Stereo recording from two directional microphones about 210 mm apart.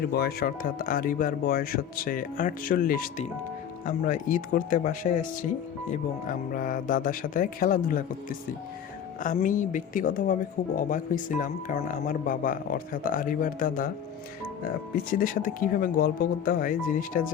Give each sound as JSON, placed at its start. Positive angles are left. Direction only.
{"t": 0.0, "sound": "speech", "side_deg": 50}
{"t": 14.9, "sound": "speech", "side_deg": 40}